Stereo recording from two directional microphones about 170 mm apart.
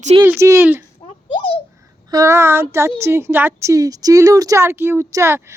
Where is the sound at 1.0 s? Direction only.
35° left (ahead or behind).